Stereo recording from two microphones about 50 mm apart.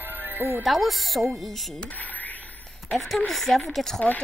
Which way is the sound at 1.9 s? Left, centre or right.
Left.